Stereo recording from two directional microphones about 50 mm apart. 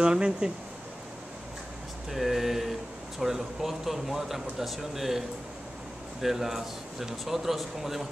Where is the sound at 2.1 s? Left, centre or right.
Centre.